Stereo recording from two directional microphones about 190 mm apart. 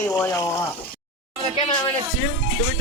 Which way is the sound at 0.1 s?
15° left (ahead or behind).